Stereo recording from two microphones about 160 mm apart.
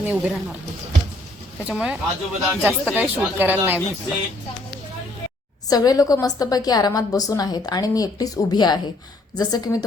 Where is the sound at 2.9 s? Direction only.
10° right (ahead or behind).